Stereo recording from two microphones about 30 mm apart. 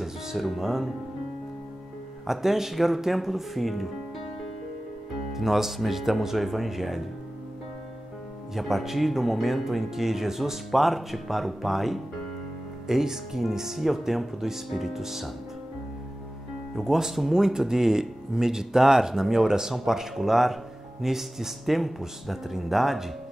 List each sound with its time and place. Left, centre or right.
0.0 s speech: centre
2.2 s speech: centre
5.3 s speech: centre
8.5 s speech: centre
16.7 s speech: centre